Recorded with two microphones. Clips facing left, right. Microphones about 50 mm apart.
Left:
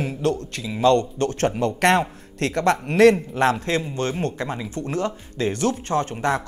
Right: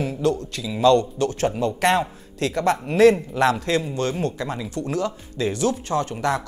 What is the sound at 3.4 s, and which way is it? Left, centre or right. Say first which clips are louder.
Speech: right 1 dB; left.